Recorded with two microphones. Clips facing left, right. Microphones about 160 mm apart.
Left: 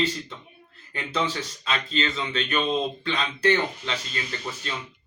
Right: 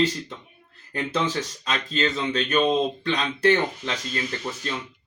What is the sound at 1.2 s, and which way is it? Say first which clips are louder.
Speech: right 2 dB; 45° right (ahead or behind).